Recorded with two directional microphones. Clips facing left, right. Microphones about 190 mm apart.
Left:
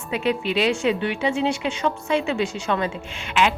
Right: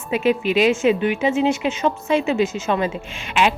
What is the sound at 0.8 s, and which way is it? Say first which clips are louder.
A woman's voice: right 4 dB; 15° right (ahead or behind).